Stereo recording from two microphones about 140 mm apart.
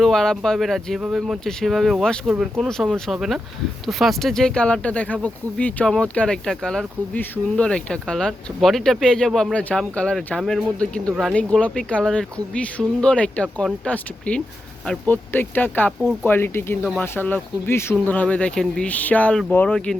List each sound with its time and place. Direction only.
0.0 s speech: 5° left (ahead or behind)